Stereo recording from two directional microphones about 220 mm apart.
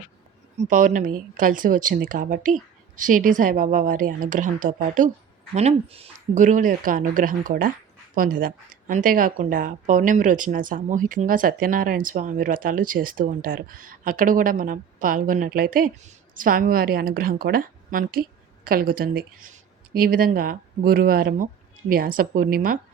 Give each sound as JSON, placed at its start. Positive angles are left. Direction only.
{"t": 0.5, "sound": "speech", "side_deg": -35}